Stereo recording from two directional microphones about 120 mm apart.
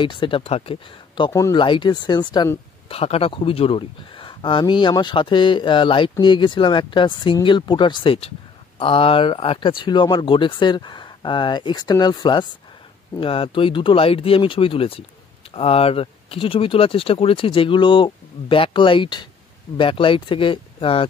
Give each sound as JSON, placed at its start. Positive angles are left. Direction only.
{"t": 0.0, "sound": "speech", "side_deg": 45}
{"t": 1.3, "sound": "speech", "side_deg": 25}
{"t": 1.6, "sound": "speech", "side_deg": 40}
{"t": 2.9, "sound": "speech", "side_deg": 55}
{"t": 13.2, "sound": "speech", "side_deg": 50}